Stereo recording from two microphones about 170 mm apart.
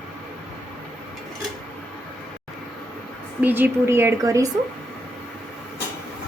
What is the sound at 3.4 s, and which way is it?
Speech, 10° right (ahead or behind).